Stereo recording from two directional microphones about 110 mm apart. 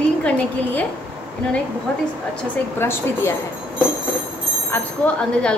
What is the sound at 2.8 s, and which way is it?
Speech, 20° left (ahead or behind).